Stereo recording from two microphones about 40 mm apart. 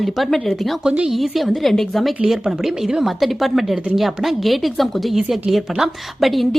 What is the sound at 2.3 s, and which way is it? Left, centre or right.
A woman's voice, centre.